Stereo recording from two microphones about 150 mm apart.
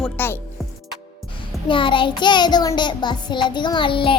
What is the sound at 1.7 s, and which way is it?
Child singing, 35° left (ahead or behind).